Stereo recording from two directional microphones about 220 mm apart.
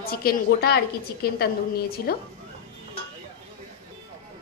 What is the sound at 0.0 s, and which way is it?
A woman's voice, 45° left (ahead or behind).